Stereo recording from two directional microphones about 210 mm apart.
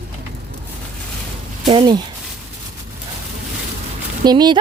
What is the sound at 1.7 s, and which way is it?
Speech, 25° right (ahead or behind).